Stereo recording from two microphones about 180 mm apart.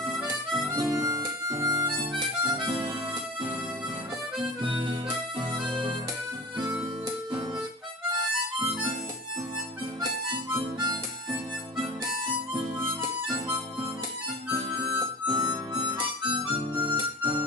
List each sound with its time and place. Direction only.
0.7 s harmonica: 20° right (ahead or behind)
4.6 s harmonica: 30° right (ahead or behind)
5.5 s music: 25° right (ahead or behind)
10.5 s harmonica: 25° right (ahead or behind)
12.8 s harmonica: 20° right (ahead or behind)
14.7 s harmonica: 25° right (ahead or behind)
16.8 s keyboard: 30° right (ahead or behind)